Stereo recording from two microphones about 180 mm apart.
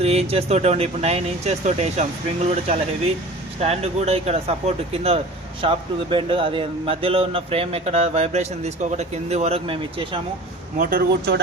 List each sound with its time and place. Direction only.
0.0 s speech: 35° right (ahead or behind)
10.8 s a man's voice: 55° right (ahead or behind)